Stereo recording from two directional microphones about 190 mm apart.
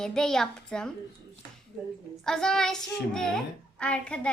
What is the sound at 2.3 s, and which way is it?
A child's voice, 5° left (ahead or behind).